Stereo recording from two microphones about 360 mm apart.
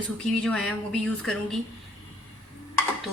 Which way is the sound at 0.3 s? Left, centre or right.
Centre.